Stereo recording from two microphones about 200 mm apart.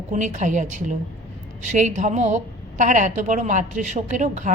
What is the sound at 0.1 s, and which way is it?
A woman's voice, 35° right (ahead or behind).